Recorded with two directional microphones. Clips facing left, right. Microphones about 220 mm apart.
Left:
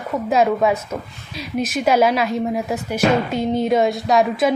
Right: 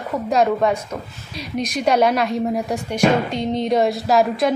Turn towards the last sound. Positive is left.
turn(degrees=0)  # may be behind; listen again after turning